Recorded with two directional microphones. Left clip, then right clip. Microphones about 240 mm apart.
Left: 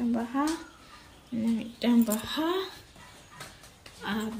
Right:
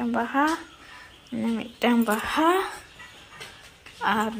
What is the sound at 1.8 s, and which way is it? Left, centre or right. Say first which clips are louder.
Speech: right 5 dB; centre.